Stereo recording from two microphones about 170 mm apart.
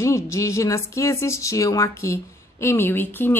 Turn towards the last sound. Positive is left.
turn(degrees=10)  # may be behind; listen again after turning